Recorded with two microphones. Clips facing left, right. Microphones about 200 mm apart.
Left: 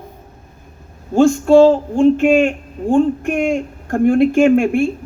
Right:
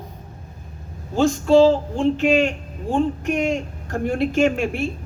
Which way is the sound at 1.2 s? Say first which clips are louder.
Left 5 dB; 50° left (ahead or behind).